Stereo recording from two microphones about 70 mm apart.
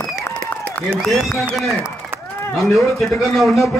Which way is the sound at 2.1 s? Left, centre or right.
Right.